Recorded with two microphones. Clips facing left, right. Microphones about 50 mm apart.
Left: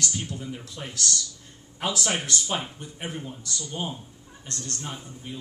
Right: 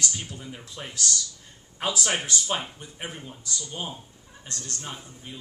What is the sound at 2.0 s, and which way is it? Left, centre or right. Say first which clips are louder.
Speech: even; right.